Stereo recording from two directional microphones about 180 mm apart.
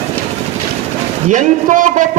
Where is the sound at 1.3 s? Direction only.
45° right (ahead or behind).